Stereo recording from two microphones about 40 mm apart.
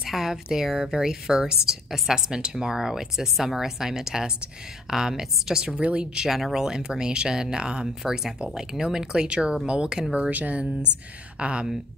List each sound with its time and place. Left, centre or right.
0.0 s speech: centre
5.8 s speech: right
6.2 s speech: centre
8.0 s speech: centre
10.3 s speech: right
11.3 s speech: right